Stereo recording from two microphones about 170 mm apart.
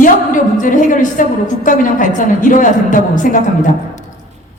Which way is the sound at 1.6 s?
50° left (ahead or behind).